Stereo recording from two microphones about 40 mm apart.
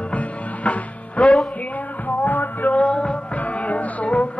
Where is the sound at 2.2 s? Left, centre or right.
Left.